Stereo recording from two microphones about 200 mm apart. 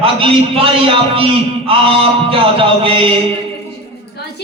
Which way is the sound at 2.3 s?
25° right (ahead or behind).